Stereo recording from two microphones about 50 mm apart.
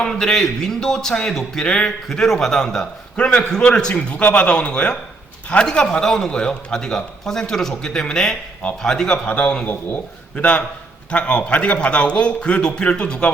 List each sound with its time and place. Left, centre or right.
0.0 s a man's voice: centre
2.0 s a man's voice: centre
3.2 s a man's voice: centre